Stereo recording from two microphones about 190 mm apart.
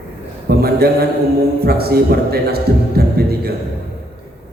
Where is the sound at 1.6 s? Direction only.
55° right (ahead or behind).